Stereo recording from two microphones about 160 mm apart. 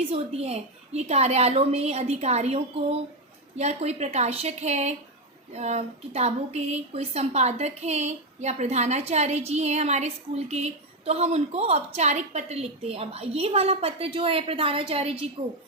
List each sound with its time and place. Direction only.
0.1 s a woman's voice: 40° right (ahead or behind)